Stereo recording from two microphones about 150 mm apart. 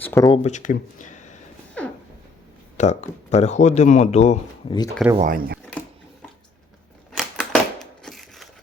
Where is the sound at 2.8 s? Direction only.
50° left (ahead or behind).